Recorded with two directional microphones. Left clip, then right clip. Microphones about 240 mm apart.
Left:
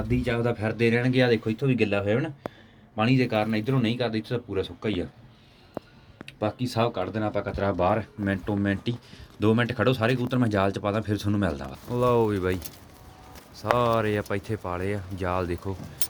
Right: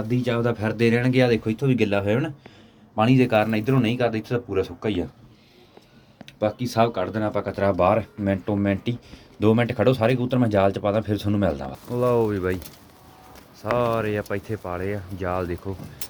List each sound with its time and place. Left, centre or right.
0.1 s speech: centre
6.2 s speech: centre
11.9 s speech: centre
13.6 s speech: left